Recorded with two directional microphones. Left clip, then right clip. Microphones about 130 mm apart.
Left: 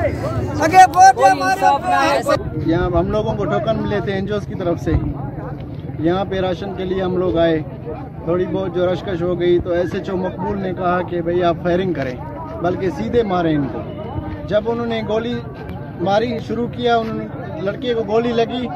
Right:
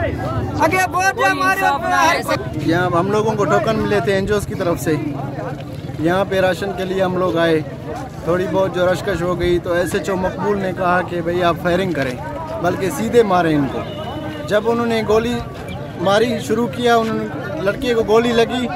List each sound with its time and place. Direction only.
0.6 s a sound: 45° right (ahead or behind)
0.9 s speech: 65° right (ahead or behind)
2.1 s speech: 30° right (ahead or behind)
6.0 s speech: 35° right (ahead or behind)